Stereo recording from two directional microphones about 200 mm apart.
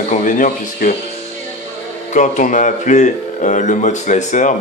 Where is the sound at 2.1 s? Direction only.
40° left (ahead or behind).